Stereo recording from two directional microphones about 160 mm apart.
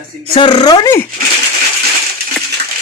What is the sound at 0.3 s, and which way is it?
Speech, 30° left (ahead or behind).